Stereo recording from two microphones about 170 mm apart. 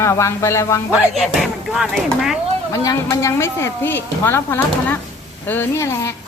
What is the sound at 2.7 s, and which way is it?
A woman's voice, 20° left (ahead or behind).